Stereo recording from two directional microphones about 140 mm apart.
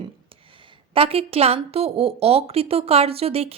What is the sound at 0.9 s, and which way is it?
A woman's voice, 45° right (ahead or behind).